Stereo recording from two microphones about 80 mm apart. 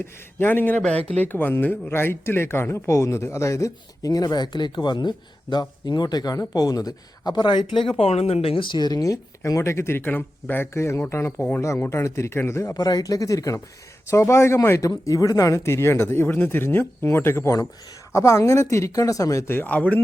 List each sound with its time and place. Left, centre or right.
0.0 s a man's voice: left
1.3 s speech: left
8.5 s speech: left
9.4 s a man's voice: left
11.6 s speech: left
12.7 s speech: left
14.8 s speech: left
19.6 s a man's voice: centre